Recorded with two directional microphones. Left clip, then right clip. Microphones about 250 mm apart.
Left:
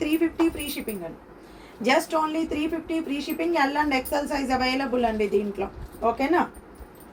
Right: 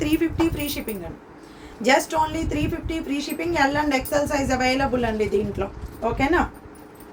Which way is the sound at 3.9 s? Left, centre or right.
Centre.